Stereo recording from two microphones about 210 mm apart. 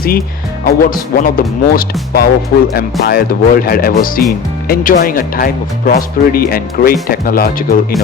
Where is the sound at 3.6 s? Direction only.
45° left (ahead or behind).